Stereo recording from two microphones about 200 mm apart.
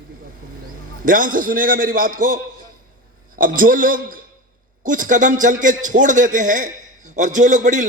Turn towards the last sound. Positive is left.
turn(degrees=-40)  # may be behind; listen again after turning